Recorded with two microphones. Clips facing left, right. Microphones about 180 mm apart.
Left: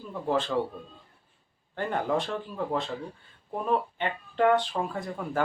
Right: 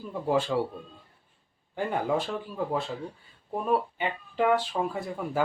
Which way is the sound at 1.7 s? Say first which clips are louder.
Even; 10° right (ahead or behind).